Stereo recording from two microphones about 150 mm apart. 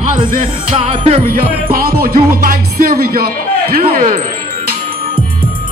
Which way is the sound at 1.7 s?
75° right (ahead or behind).